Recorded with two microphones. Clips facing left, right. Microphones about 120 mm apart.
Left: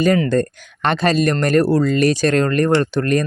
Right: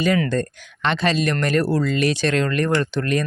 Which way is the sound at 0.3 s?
45° left (ahead or behind).